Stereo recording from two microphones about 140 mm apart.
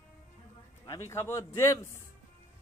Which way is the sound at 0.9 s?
20° left (ahead or behind).